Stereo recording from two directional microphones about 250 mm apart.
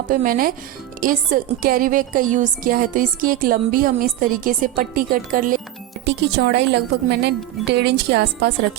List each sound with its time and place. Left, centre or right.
0.1 s a woman's voice: right